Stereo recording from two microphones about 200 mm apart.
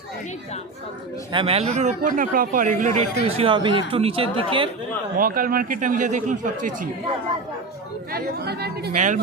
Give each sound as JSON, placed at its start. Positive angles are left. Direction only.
{"t": 1.3, "sound": "a man's voice", "side_deg": -25}
{"t": 5.1, "sound": "speech", "side_deg": -45}
{"t": 8.1, "sound": "speech", "side_deg": -55}
{"t": 9.0, "sound": "speech", "side_deg": -40}